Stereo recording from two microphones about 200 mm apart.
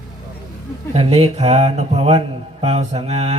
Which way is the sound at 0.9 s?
30° right (ahead or behind).